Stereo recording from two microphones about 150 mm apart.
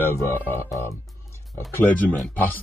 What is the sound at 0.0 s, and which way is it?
Speech, 15° left (ahead or behind).